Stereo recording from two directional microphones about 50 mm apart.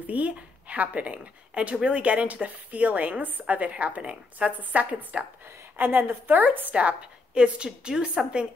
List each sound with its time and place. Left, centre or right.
0.0 s a woman's voice: right
5.4 s a woman's voice: right
6.7 s a woman's voice: right